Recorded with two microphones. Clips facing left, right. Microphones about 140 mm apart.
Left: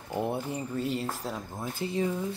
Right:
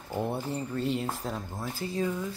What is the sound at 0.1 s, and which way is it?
Speech, 15° left (ahead or behind).